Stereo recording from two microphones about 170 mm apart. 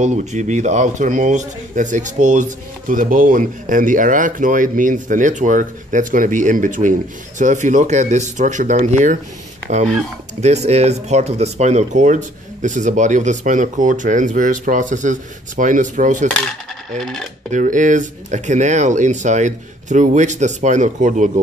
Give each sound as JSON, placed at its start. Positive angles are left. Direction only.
{"t": 0.0, "sound": "speech", "side_deg": -45}
{"t": 17.0, "sound": "coin", "side_deg": 0}
{"t": 17.5, "sound": "speech", "side_deg": -45}